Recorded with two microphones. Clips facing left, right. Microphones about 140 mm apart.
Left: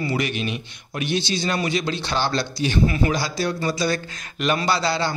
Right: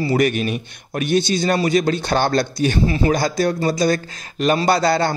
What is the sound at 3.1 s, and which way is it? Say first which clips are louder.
A man's voice: right 6 dB; 50° right (ahead or behind).